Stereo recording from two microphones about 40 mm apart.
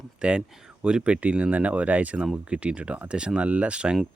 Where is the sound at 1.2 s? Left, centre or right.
Right.